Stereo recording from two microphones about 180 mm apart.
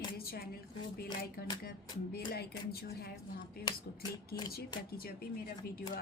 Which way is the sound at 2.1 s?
60° left (ahead or behind).